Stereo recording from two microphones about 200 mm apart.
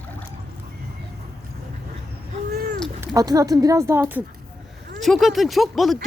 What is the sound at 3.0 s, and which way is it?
Speech, 15° right (ahead or behind).